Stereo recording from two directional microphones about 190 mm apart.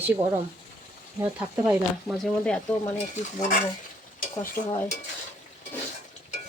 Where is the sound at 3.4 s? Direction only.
40° left (ahead or behind).